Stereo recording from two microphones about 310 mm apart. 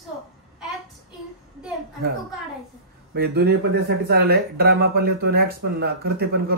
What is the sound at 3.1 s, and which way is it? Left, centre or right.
Speech, right.